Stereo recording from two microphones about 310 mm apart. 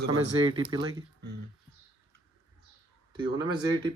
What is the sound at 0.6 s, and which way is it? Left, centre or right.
Speech, centre.